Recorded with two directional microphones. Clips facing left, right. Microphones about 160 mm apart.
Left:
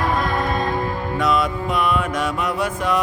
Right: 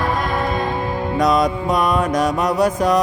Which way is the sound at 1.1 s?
40° right (ahead or behind).